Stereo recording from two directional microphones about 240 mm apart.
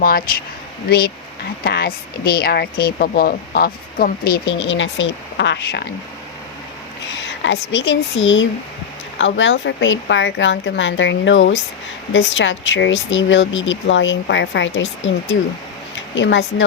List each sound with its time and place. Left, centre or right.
0.0 s speech: left
7.4 s speech: left